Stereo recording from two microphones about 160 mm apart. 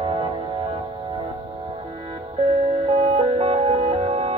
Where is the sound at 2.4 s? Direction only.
40° right (ahead or behind).